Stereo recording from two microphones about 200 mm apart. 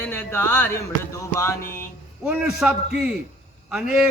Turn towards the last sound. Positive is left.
turn(degrees=-5)  # may be behind; listen again after turning